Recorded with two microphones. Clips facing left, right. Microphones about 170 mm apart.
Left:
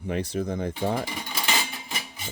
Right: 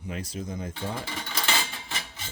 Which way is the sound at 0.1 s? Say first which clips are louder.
Left 7 dB; 65° left (ahead or behind).